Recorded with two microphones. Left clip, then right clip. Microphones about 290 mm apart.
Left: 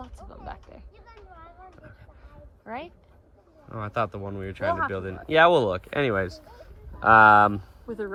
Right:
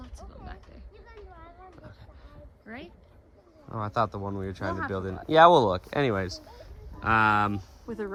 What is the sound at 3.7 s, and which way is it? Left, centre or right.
Speech, centre.